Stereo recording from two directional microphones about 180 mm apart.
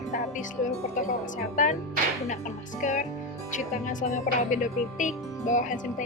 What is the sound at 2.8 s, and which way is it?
Speech, 45° left (ahead or behind).